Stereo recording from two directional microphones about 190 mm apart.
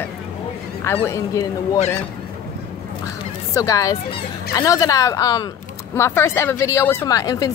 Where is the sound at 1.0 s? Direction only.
15° left (ahead or behind).